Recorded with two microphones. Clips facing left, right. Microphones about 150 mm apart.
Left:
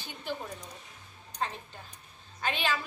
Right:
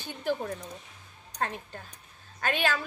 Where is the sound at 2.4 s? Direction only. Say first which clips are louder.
Right 3 dB; 50° right (ahead or behind).